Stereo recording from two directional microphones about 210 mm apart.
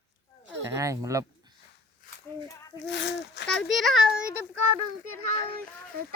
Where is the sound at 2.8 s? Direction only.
55° left (ahead or behind).